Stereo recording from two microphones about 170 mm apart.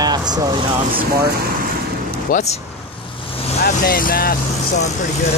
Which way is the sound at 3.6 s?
60° left (ahead or behind).